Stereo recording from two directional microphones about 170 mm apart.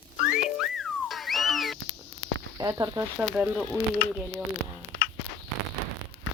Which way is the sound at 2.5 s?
20° right (ahead or behind).